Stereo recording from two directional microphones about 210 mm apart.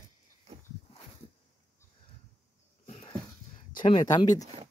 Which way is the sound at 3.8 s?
20° left (ahead or behind).